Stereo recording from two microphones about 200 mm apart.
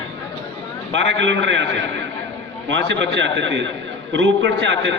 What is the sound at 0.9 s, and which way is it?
A man's voice, 65° right (ahead or behind).